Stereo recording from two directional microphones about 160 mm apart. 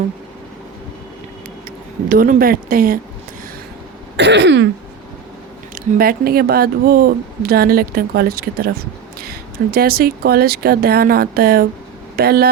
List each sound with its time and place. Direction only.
2.0 s speech: 65° right (ahead or behind)
4.2 s throat clearing: 90° right
5.7 s speech: 65° right (ahead or behind)